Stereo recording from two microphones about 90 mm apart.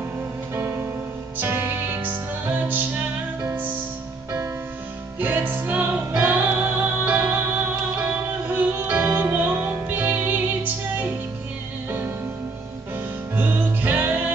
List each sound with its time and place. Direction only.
0.6 s music: 30° right (ahead or behind)
5.2 s music: 20° right (ahead or behind)
13.4 s music: 20° right (ahead or behind)